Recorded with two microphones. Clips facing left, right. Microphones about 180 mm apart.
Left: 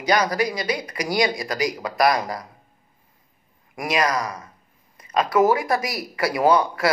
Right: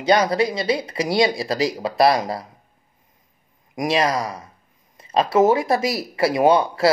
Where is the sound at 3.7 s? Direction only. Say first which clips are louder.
Right 2 dB; 25° right (ahead or behind).